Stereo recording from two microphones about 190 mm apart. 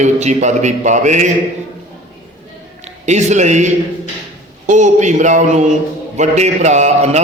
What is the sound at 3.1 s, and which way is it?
A man's voice, 35° right (ahead or behind).